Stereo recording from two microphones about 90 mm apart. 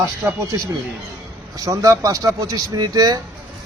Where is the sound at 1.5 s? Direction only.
40° right (ahead or behind).